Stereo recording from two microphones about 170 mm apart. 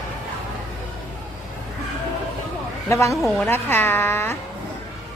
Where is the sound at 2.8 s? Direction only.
15° left (ahead or behind).